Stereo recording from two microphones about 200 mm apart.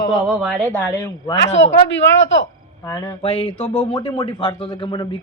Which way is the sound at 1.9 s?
65° left (ahead or behind).